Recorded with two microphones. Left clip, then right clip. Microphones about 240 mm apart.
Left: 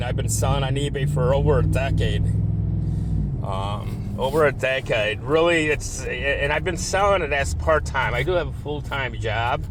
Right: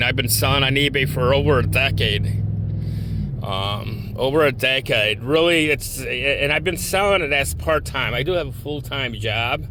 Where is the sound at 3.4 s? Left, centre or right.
Right.